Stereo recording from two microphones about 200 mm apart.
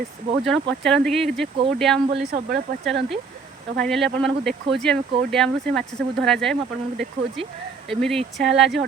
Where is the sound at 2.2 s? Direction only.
50° right (ahead or behind).